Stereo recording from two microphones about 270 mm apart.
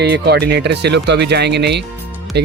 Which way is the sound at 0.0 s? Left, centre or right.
Right.